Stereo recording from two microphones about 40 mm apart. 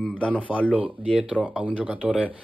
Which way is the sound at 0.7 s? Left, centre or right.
Right.